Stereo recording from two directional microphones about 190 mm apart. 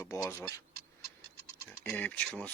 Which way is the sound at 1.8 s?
10° left (ahead or behind).